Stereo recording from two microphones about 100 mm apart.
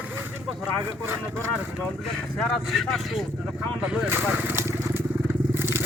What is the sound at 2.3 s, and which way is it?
Speech, 5° left (ahead or behind).